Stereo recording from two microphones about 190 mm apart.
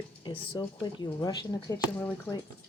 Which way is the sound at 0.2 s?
25° left (ahead or behind).